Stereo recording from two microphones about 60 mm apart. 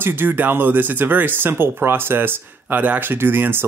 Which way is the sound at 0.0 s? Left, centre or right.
Right.